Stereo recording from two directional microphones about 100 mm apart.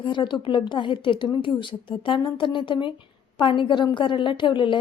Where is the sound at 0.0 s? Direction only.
55° left (ahead or behind).